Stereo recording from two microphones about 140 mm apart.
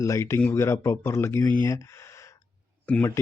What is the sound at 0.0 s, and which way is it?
Speech, 20° left (ahead or behind).